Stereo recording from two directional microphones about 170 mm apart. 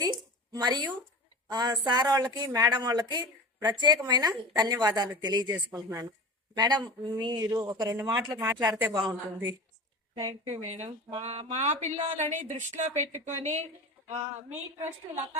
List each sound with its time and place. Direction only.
0.0 s a sound: 25° right (ahead or behind)
1.5 s speech: 25° right (ahead or behind)
5.5 s speech: 15° right (ahead or behind)
8.9 s speech: 25° right (ahead or behind)
10.2 s speech: 35° right (ahead or behind)